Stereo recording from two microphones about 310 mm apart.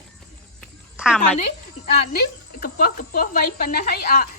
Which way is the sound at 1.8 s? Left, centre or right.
Left.